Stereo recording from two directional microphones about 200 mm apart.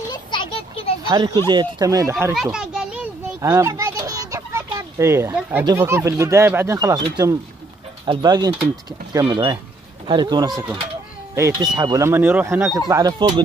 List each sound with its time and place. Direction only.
0.1 s a sound: 25° left (ahead or behind)
1.0 s speech: 25° right (ahead or behind)
2.5 s children playing: 5° right (ahead or behind)
3.3 s a sound: 15° right (ahead or behind)
5.7 s speech: 10° right (ahead or behind)
10.5 s speech: 5° right (ahead or behind)
11.3 s speech: 15° right (ahead or behind)